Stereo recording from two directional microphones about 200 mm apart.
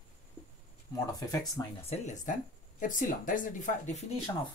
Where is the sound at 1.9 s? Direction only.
35° left (ahead or behind).